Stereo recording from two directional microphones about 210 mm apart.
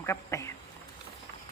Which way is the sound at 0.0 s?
15° left (ahead or behind).